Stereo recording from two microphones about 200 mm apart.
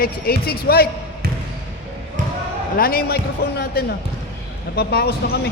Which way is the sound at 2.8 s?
50° left (ahead or behind).